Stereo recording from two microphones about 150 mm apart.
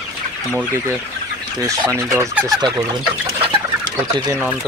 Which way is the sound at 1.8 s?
15° right (ahead or behind).